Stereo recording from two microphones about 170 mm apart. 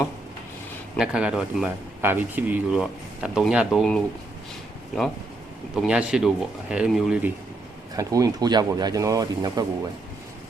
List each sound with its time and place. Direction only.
0.9 s speech: 5° right (ahead or behind)
5.7 s speech: 5° right (ahead or behind)
7.9 s speech: 20° right (ahead or behind)